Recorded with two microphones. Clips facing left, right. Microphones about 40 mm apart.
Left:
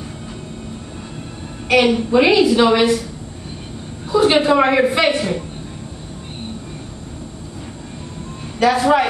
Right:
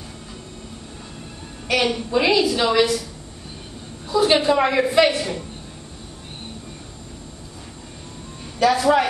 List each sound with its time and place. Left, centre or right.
1.7 s a woman's voice: centre
4.1 s a woman's voice: left
8.5 s a woman's voice: centre